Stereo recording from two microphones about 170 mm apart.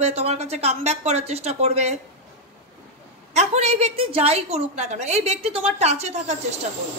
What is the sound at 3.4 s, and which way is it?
A woman's voice, 40° right (ahead or behind).